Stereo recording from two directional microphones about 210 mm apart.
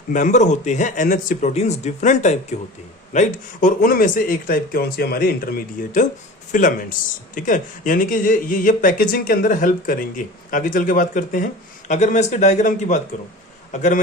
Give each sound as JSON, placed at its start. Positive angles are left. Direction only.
{"t": 0.1, "sound": "speech", "side_deg": 35}